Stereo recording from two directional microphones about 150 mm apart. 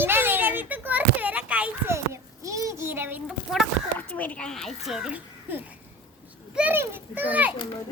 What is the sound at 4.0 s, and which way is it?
A woman's voice, 10° left (ahead or behind).